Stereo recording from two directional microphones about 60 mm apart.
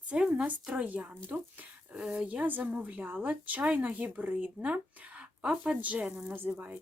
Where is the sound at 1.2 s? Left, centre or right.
Right.